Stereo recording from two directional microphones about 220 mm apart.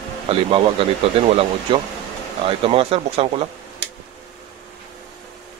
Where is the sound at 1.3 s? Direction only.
25° right (ahead or behind).